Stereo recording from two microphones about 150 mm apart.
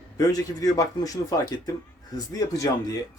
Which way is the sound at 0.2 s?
25° left (ahead or behind).